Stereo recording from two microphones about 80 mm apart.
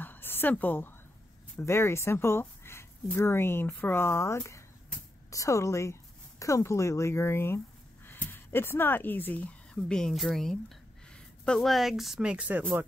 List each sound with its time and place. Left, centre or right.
0.0 s a sound: left
1.6 s speech: left
9.8 s a woman's voice: centre
12.2 s speech: centre